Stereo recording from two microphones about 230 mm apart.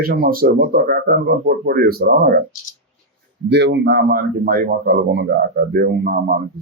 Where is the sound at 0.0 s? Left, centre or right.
Right.